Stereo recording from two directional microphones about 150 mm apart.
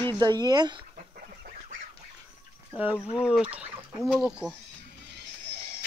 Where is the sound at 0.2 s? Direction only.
25° right (ahead or behind).